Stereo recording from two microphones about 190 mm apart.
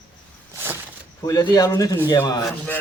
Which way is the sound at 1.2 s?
20° left (ahead or behind).